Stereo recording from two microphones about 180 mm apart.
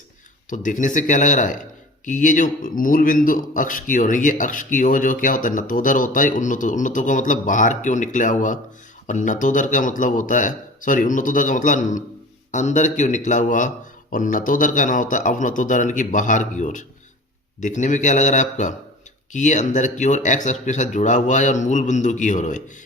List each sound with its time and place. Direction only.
0.5 s speech: 45° left (ahead or behind)